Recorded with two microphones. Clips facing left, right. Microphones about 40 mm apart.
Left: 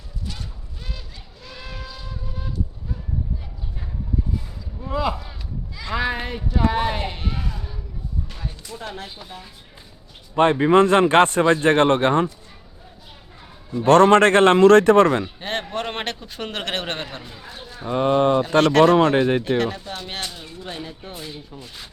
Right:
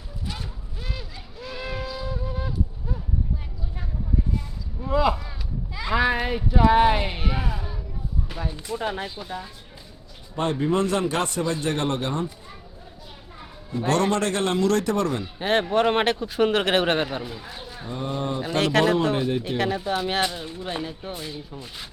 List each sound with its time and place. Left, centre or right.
0.9 s vehicle: centre
4.8 s a man's voice: centre
9.0 s speech: centre
10.3 s speech: left
13.8 s speech: left
15.4 s a man's voice: centre
17.8 s speech: left
18.6 s speech: centre
19.1 s speech: left
19.5 s a man's voice: centre